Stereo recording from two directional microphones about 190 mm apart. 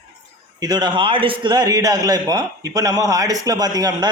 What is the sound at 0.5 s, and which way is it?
A man's voice, 20° right (ahead or behind).